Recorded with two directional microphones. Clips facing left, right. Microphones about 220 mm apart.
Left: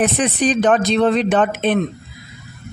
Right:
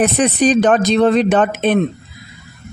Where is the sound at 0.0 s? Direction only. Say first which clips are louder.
Right 3 dB; 40° right (ahead or behind).